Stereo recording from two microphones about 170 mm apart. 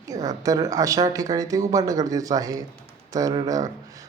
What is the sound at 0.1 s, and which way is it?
Speech, 20° right (ahead or behind).